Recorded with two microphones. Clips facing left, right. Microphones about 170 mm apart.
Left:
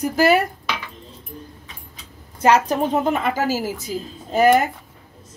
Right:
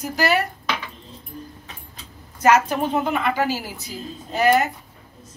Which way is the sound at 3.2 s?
45° left (ahead or behind).